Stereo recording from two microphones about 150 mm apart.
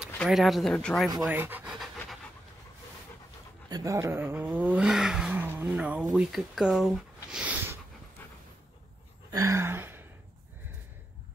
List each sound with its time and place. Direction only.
0.0 s speech: centre (ahead or behind)
1.3 s pant: 10° right (ahead or behind)
3.6 s speech: 25° right (ahead or behind)
9.3 s a sound: 20° right (ahead or behind)